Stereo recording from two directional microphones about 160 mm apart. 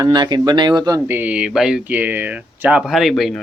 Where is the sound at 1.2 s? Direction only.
5° right (ahead or behind).